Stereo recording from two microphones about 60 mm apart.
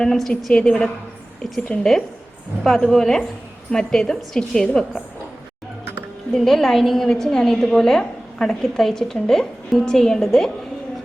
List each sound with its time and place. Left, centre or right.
0.0 s a woman's voice: centre
6.3 s a woman's voice: centre